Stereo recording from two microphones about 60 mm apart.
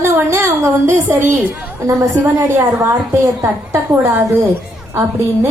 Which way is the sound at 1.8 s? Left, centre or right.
Right.